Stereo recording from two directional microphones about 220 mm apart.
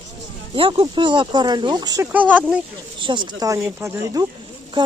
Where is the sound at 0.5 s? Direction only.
25° right (ahead or behind); by 2.6 s 5° right (ahead or behind).